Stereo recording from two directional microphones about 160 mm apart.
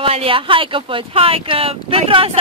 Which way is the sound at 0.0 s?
35° right (ahead or behind).